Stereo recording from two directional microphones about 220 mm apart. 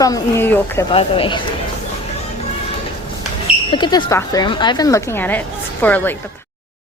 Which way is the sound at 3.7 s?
20° left (ahead or behind).